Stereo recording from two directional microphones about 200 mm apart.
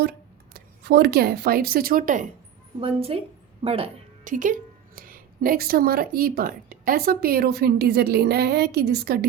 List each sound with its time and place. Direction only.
0.5 s speech: 55° right (ahead or behind)
2.8 s a woman's voice: 30° right (ahead or behind); by 9.2 s 55° right (ahead or behind)